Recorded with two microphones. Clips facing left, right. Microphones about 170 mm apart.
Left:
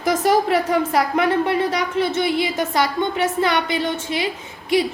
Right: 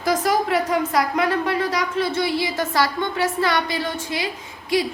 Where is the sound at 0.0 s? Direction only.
25° left (ahead or behind).